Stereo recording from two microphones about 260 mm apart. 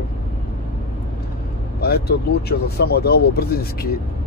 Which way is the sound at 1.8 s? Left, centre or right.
Left.